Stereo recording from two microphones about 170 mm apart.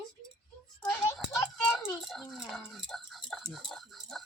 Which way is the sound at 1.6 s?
5° left (ahead or behind).